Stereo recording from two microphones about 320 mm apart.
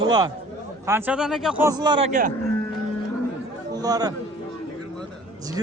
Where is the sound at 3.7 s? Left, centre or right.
Centre.